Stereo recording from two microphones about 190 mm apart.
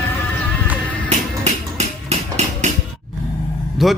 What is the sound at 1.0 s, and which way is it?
Music, 35° right (ahead or behind).